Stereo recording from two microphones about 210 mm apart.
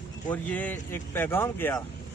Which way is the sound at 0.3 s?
5° left (ahead or behind).